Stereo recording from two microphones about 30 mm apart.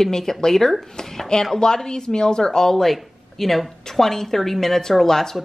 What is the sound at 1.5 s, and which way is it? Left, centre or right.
Speech, left.